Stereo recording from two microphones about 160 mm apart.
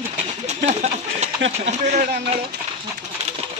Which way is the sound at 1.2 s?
45° right (ahead or behind).